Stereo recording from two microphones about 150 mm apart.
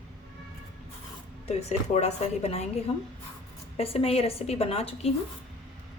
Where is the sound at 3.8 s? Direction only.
40° left (ahead or behind).